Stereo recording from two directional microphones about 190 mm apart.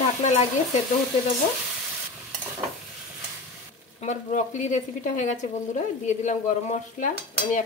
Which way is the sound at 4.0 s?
40° left (ahead or behind).